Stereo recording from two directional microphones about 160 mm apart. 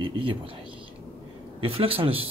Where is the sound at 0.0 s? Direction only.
35° right (ahead or behind).